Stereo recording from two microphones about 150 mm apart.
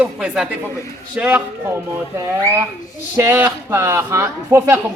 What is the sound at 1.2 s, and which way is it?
Speech, 10° right (ahead or behind).